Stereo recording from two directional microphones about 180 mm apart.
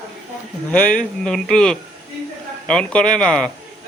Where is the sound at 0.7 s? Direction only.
5° left (ahead or behind).